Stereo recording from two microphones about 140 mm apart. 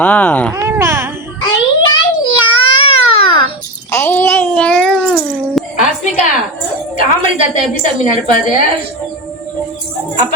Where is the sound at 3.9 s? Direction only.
15° left (ahead or behind).